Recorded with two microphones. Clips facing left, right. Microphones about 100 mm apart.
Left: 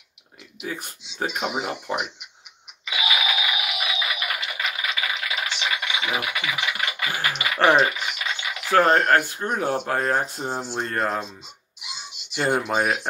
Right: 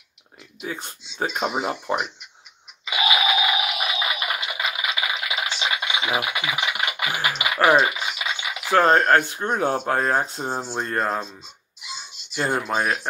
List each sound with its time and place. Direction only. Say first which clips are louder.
0.7 s speech: even; 25° right (ahead or behind)
3.1 s a sound: right 5 dB; 25° right (ahead or behind)
3.8 s music: right 2 dB; 25° right (ahead or behind)
8.8 s speech: right 1 dB; 25° right (ahead or behind)
12.5 s speech: even; 10° left (ahead or behind)